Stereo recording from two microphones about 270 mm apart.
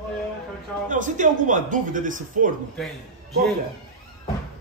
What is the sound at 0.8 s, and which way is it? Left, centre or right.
Speech, right.